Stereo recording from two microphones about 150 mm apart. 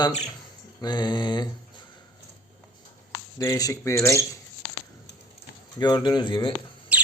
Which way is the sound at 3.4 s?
20° left (ahead or behind).